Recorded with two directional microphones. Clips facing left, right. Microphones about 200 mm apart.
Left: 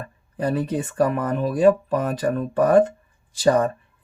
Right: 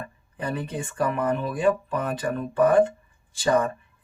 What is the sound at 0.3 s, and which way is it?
Speech, 35° left (ahead or behind).